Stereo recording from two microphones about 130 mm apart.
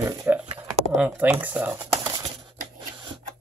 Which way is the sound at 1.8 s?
30° right (ahead or behind).